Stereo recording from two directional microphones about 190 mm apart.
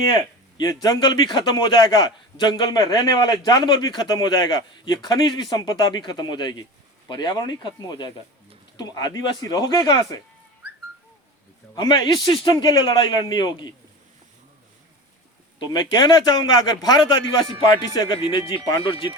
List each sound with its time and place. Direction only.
0.1 s speech: 20° left (ahead or behind)
11.7 s speech: 20° left (ahead or behind)
15.5 s speech: 25° left (ahead or behind)